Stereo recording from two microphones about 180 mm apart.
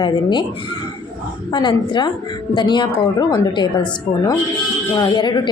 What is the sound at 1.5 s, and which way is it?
A woman's voice, 25° left (ahead or behind).